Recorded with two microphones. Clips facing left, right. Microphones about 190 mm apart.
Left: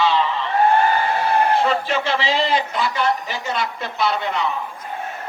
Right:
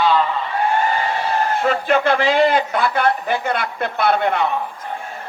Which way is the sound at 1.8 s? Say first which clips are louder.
Right 5 dB; 55° right (ahead or behind).